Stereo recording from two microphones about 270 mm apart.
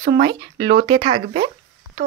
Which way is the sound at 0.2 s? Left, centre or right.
Centre.